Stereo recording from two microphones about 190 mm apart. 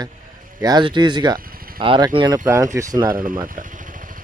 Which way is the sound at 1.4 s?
50° right (ahead or behind).